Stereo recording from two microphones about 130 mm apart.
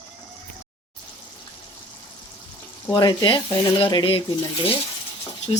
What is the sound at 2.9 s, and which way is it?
Speech, 35° left (ahead or behind).